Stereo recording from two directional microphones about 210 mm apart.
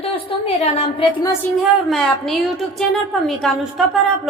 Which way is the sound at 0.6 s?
30° left (ahead or behind).